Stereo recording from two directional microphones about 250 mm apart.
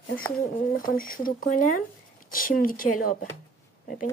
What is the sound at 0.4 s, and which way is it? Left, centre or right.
A woman's voice, left.